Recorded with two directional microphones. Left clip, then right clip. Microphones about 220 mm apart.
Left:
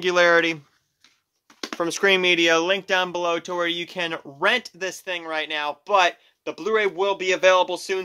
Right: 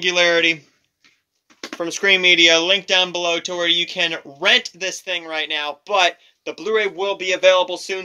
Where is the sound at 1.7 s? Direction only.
30° left (ahead or behind).